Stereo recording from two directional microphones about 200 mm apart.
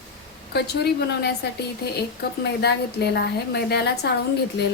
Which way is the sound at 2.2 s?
55° left (ahead or behind).